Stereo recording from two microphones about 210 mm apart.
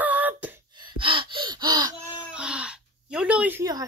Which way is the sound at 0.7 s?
25° right (ahead or behind).